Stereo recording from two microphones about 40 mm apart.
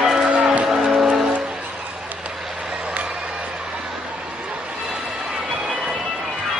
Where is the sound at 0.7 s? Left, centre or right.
Centre.